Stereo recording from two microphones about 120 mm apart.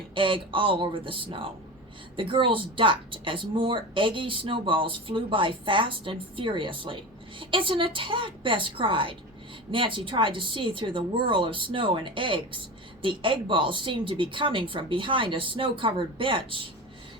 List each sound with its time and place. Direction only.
0.1 s a woman's voice: 45° right (ahead or behind)